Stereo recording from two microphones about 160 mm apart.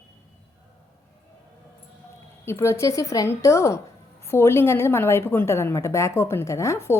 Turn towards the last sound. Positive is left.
turn(degrees=15)  # may be behind; listen again after turning